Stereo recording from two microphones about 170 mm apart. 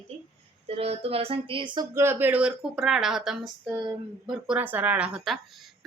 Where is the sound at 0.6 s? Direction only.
35° right (ahead or behind).